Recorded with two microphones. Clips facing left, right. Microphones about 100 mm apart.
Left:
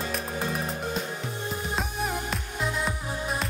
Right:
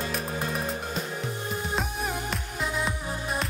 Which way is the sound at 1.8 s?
Centre (ahead or behind).